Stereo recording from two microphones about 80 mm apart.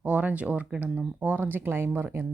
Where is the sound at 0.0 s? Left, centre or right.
Centre.